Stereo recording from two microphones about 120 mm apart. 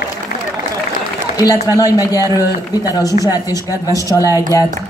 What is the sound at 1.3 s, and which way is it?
A man's voice, 30° left (ahead or behind).